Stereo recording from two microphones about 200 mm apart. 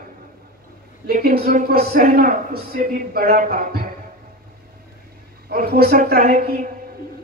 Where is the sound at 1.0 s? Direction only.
50° right (ahead or behind).